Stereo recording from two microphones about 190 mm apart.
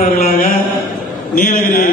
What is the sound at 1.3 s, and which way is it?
Speech, 45° left (ahead or behind).